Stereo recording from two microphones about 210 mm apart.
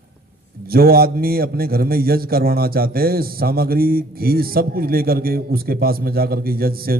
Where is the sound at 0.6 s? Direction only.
45° right (ahead or behind).